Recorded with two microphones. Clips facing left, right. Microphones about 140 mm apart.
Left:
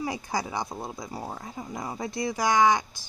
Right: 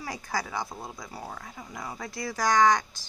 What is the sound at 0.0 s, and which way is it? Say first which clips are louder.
Speech: left 3 dB; 15° left (ahead or behind).